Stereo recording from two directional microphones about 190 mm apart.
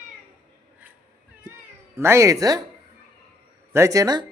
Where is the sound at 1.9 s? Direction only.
15° right (ahead or behind).